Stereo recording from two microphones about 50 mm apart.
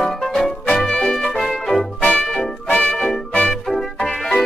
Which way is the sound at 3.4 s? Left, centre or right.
Centre.